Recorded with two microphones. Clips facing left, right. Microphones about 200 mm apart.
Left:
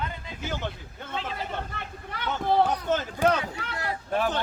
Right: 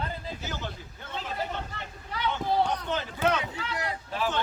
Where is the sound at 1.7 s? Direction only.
55° left (ahead or behind).